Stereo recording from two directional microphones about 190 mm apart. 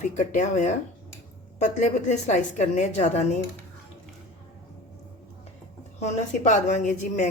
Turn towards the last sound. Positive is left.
turn(degrees=40)  # may be behind; listen again after turning